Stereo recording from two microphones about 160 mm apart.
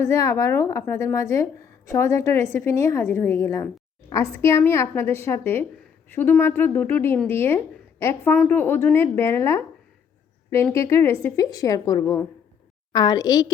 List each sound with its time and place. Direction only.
0.1 s a woman's voice: 20° left (ahead or behind)